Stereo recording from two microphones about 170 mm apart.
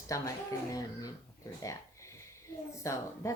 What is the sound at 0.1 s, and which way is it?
Speech, 20° left (ahead or behind).